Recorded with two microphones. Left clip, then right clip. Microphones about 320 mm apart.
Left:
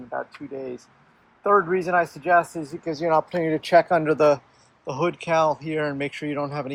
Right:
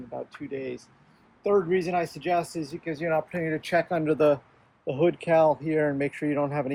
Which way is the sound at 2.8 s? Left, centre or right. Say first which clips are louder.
Left 6 dB; centre.